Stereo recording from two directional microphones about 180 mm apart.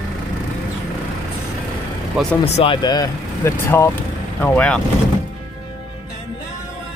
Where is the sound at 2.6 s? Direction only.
25° left (ahead or behind); by 4.8 s 10° left (ahead or behind).